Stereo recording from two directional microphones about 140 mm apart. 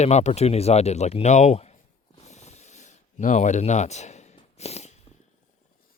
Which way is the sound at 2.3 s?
55° left (ahead or behind).